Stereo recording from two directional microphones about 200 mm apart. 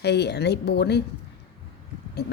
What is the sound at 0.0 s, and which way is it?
Speech, 55° left (ahead or behind).